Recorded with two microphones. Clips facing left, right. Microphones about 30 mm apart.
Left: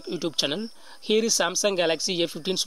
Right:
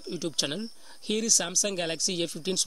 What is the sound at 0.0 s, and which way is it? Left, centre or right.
Speech, left.